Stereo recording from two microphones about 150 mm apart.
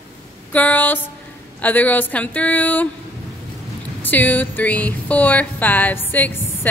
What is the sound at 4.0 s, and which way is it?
Speech, 10° left (ahead or behind).